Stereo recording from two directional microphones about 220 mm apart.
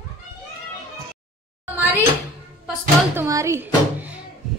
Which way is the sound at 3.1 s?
10° right (ahead or behind).